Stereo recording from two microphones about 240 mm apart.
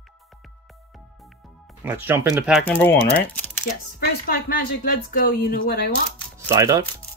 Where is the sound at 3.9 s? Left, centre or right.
Left.